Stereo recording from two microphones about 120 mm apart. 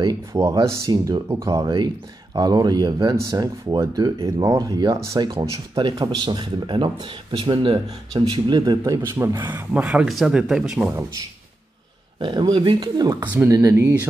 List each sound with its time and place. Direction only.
0.3 s speech: 25° right (ahead or behind)
9.8 s speech: 5° right (ahead or behind)
10.9 s speech: 25° right (ahead or behind)
12.2 s speech: 40° right (ahead or behind)
13.4 s speech: 20° right (ahead or behind)